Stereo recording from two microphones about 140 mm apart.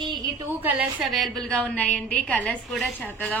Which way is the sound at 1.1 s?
Centre (ahead or behind).